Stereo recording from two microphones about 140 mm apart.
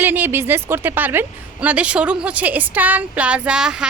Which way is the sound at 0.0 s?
15° right (ahead or behind).